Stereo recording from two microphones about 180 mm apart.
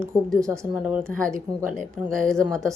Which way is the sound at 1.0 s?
5° left (ahead or behind).